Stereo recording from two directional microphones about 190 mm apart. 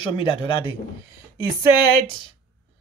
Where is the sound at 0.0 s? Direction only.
25° left (ahead or behind).